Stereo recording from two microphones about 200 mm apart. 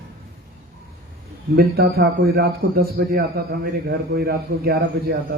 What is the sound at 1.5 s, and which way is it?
A man's voice, 50° right (ahead or behind).